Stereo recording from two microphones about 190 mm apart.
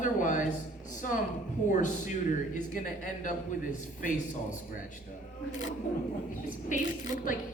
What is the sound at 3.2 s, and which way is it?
Speech, 40° left (ahead or behind).